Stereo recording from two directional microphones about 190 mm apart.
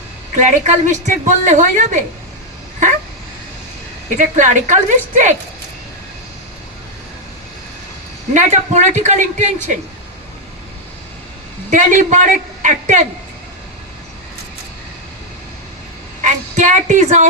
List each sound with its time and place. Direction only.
0.3 s a woman's voice: 40° right (ahead or behind)
4.1 s a woman's voice: 40° right (ahead or behind)
8.3 s a woman's voice: 40° right (ahead or behind)
11.7 s a woman's voice: 40° right (ahead or behind)
16.2 s a woman's voice: 40° right (ahead or behind)